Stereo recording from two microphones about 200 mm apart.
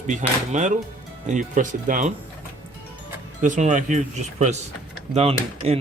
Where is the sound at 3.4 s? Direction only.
40° right (ahead or behind).